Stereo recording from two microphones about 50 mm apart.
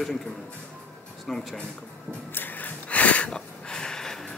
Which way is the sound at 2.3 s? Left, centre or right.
Left.